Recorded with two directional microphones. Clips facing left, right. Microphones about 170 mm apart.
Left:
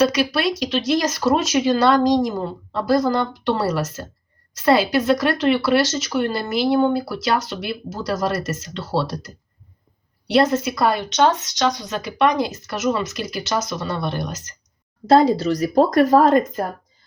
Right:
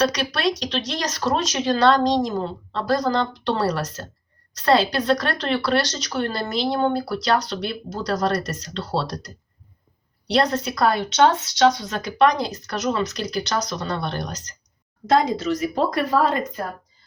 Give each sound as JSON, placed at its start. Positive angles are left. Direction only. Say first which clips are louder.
{"t": 0.0, "sound": "speech", "louder": "left 3 dB", "side_deg": 5}
{"t": 15.0, "sound": "speech", "louder": "left 5 dB", "side_deg": 30}